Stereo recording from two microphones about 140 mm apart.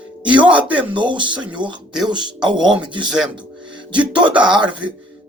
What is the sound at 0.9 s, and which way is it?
Speech, 35° right (ahead or behind).